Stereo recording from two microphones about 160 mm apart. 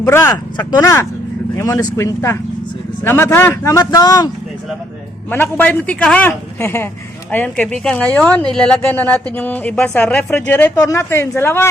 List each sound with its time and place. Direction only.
0.0 s a woman's voice: 15° left (ahead or behind)
5.3 s a woman's voice: 10° left (ahead or behind)